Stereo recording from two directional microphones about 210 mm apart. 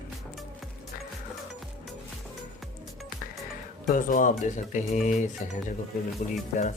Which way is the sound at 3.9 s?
40° left (ahead or behind).